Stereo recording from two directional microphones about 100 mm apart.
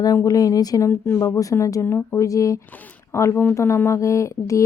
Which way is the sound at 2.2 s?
35° left (ahead or behind).